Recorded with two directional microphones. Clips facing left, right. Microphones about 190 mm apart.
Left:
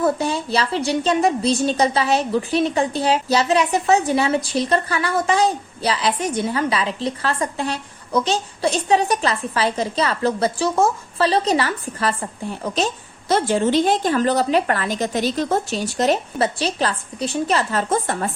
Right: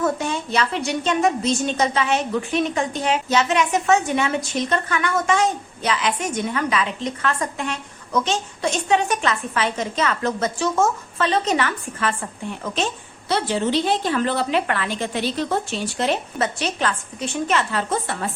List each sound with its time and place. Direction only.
0.0 s a woman's voice: 35° left (ahead or behind)